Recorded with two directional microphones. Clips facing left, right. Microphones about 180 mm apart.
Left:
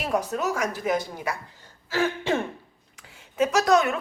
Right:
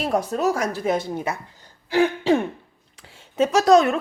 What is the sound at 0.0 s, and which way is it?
A woman's voice, 35° right (ahead or behind).